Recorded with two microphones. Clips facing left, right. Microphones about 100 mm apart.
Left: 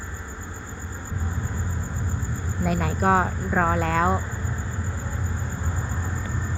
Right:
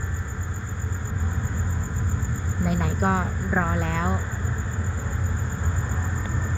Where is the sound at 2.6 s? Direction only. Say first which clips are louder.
Left 2 dB; 60° left (ahead or behind).